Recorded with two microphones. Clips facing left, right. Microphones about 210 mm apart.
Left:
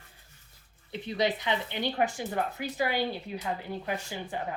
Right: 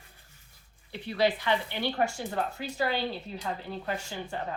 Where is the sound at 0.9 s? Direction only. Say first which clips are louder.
Right 2 dB; 20° left (ahead or behind).